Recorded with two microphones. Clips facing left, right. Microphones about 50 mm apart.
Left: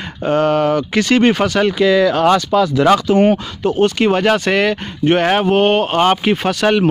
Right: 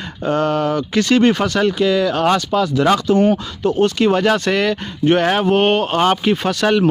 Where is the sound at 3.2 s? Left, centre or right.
Left.